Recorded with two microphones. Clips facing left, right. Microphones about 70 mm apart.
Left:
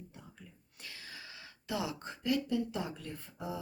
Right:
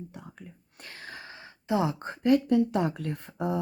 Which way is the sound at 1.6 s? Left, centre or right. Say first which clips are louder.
Right 10 dB; right.